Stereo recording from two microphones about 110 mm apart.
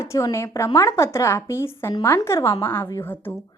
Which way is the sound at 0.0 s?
30° left (ahead or behind).